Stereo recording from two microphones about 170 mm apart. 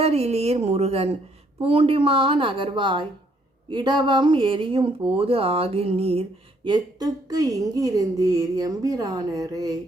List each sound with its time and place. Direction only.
0.0 s a woman's voice: 35° right (ahead or behind)
6.7 s speech: 25° right (ahead or behind)